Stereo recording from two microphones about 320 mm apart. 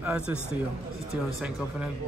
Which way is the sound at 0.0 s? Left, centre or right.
Centre.